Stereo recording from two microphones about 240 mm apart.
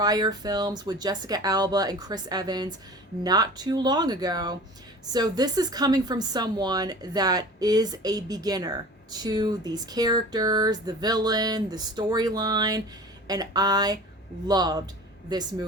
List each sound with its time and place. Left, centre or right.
0.0 s a woman's voice: centre